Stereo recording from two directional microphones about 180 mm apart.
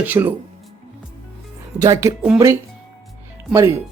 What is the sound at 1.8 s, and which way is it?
Speech, 15° right (ahead or behind).